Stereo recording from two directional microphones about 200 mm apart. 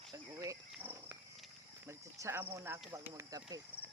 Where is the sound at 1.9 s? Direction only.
15° right (ahead or behind).